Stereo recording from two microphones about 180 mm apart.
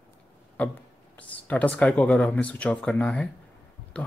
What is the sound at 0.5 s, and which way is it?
Speech, 10° left (ahead or behind).